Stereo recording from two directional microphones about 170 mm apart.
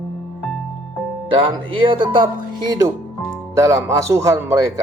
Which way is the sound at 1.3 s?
30° right (ahead or behind).